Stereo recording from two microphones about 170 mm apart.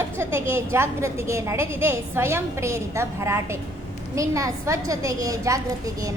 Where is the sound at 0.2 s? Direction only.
15° right (ahead or behind).